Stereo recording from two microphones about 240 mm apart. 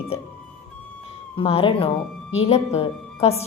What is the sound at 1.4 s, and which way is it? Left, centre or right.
A woman's voice, left.